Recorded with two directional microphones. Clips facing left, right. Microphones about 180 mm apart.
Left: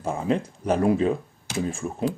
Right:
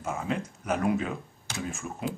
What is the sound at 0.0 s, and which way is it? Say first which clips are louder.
Speech: left 6 dB; 30° left (ahead or behind).